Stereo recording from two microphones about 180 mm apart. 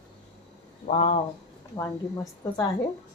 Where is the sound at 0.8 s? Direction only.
40° left (ahead or behind).